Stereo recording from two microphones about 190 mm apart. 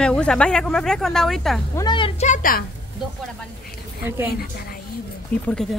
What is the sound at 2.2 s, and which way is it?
Speech, 45° left (ahead or behind).